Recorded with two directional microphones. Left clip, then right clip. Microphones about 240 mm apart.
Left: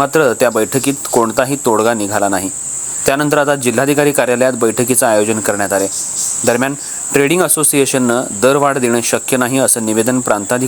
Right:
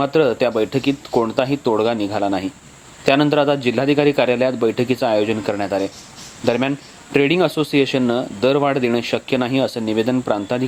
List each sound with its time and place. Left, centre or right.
0.0 s speech: left